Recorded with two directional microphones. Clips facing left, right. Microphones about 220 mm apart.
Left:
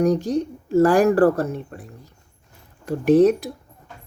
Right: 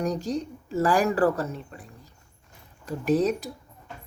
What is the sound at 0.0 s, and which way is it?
Speech, 55° left (ahead or behind).